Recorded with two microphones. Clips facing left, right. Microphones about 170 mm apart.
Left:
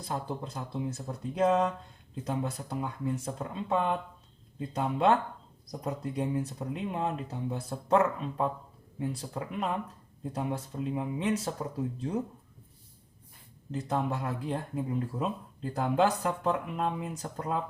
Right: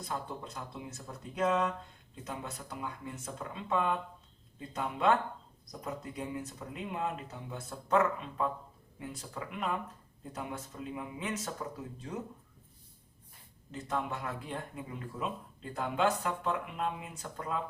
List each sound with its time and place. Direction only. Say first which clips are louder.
0.0 s speech: left 4 dB; 30° left (ahead or behind)
13.8 s speech: left 4 dB; 35° left (ahead or behind)